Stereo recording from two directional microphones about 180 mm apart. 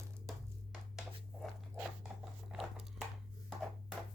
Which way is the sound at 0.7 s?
5° right (ahead or behind).